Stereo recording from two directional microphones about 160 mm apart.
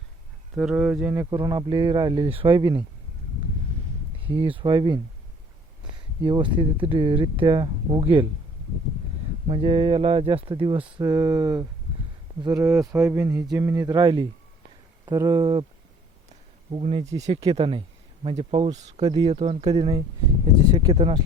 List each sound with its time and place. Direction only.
0.5 s speech: 5° right (ahead or behind); by 2.8 s 30° right (ahead or behind)
4.4 s speech: 30° right (ahead or behind)
6.2 s speech: 30° right (ahead or behind)
9.5 s speech: 35° right (ahead or behind)
16.7 s speech: 35° right (ahead or behind)
19.0 s speech: 25° right (ahead or behind)
19.3 s speech: 40° right (ahead or behind)